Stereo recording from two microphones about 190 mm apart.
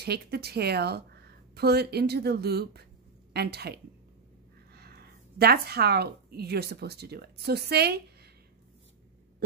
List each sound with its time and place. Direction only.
0.0 s a woman's voice: 55° right (ahead or behind)